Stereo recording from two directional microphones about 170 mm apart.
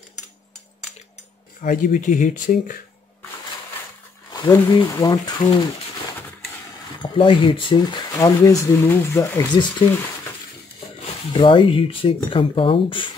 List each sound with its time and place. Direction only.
1.6 s speech: 50° left (ahead or behind)
4.3 s speech: 25° left (ahead or behind)
7.0 s speech: 30° left (ahead or behind)
11.3 s speech: 30° left (ahead or behind)